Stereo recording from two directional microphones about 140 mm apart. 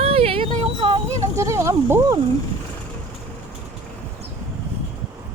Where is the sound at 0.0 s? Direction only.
45° right (ahead or behind).